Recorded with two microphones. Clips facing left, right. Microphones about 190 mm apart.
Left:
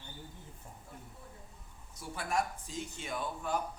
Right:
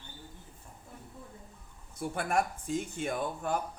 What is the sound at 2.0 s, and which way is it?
Speech, 55° right (ahead or behind).